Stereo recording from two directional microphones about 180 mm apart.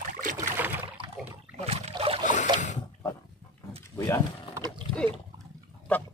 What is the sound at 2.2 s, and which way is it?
Boat, 45° left (ahead or behind).